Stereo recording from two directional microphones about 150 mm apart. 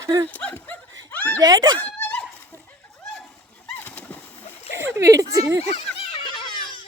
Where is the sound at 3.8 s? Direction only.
10° left (ahead or behind).